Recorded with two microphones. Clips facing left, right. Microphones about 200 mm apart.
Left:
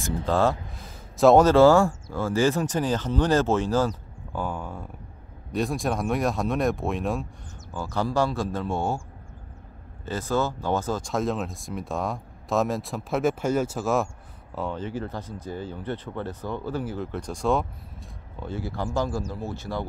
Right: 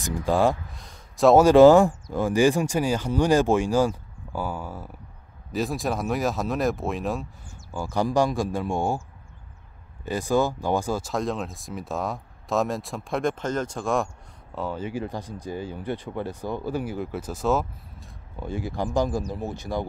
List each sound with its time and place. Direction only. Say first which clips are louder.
0.0 s speech: right 1 dB; 10° right (ahead or behind)
0.7 s a sound: left 3 dB; 5° left (ahead or behind)
1.4 s speech: right 3 dB; 15° right (ahead or behind); by 7.2 s centre (ahead or behind)
7.7 s speech: right 2 dB; 15° right (ahead or behind)
10.0 s speech: right 3 dB; 15° right (ahead or behind)
14.8 s speech: right 1 dB; 10° right (ahead or behind)
18.4 s speech: right 2 dB; 15° right (ahead or behind)